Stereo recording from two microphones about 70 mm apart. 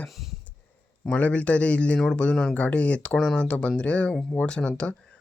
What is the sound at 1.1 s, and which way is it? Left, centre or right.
Speech, centre.